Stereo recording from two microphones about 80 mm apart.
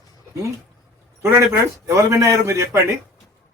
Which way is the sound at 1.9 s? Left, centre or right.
Right.